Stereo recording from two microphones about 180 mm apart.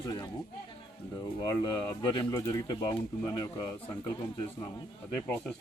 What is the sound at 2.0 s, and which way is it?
Speech, 25° left (ahead or behind).